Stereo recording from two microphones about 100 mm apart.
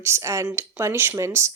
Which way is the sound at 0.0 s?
30° right (ahead or behind).